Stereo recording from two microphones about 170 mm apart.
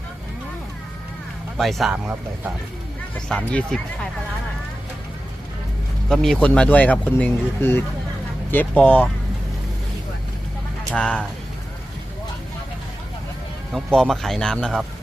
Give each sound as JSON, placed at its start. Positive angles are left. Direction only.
{"t": 1.5, "sound": "speech", "side_deg": 0}
{"t": 3.2, "sound": "speech", "side_deg": 5}
{"t": 6.1, "sound": "speech", "side_deg": 5}
{"t": 10.9, "sound": "speech", "side_deg": 5}
{"t": 13.7, "sound": "speech", "side_deg": 0}